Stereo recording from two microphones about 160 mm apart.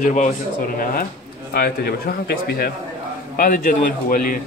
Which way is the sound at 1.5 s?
70° left (ahead or behind).